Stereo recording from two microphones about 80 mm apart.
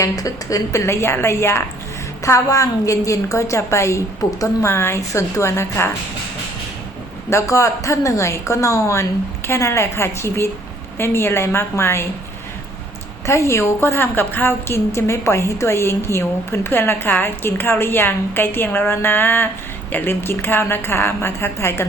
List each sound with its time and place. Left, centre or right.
0.0 s a woman's voice: left
4.7 s a woman's voice: left
7.3 s a woman's voice: left
13.2 s a woman's voice: left